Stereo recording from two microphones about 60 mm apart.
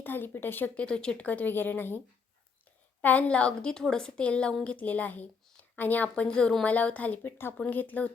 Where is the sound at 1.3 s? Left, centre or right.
Left.